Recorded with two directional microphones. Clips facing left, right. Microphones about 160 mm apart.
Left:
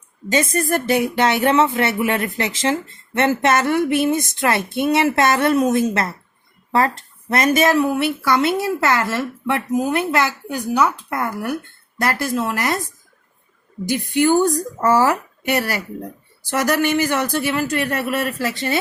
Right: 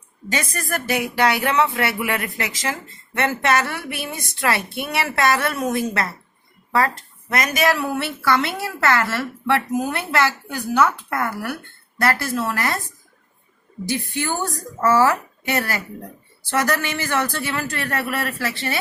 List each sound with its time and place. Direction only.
0.3 s speech: 20° left (ahead or behind)
13.8 s speech: 15° left (ahead or behind)